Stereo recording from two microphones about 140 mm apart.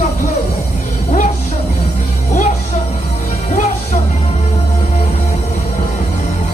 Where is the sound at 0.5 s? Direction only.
55° left (ahead or behind).